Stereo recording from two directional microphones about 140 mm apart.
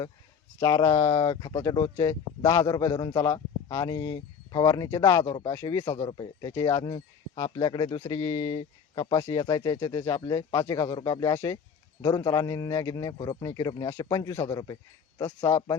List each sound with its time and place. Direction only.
0.6 s speech: 25° left (ahead or behind)
6.1 s speech: 30° left (ahead or behind)